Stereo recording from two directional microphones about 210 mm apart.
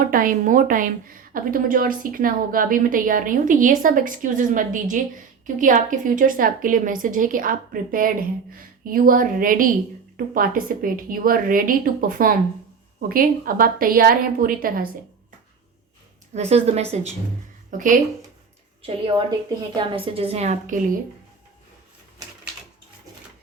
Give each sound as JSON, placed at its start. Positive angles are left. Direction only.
{"t": 0.1, "sound": "a woman's voice", "side_deg": -40}
{"t": 16.3, "sound": "a woman's voice", "side_deg": -30}
{"t": 18.8, "sound": "a woman's voice", "side_deg": -25}